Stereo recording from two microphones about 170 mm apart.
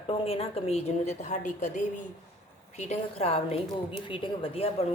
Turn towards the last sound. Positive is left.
turn(degrees=35)  # may be behind; listen again after turning